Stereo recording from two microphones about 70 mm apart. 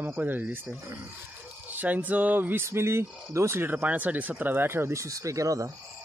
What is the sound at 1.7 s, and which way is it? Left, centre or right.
Speech, right.